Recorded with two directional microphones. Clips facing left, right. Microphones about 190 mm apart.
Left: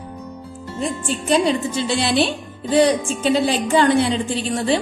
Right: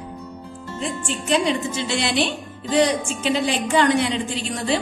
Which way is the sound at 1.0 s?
35° left (ahead or behind).